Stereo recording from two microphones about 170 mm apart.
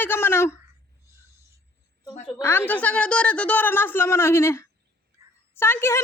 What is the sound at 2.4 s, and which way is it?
Speech, 15° left (ahead or behind).